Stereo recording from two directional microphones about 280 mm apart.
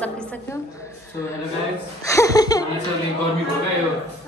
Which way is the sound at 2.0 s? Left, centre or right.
Centre.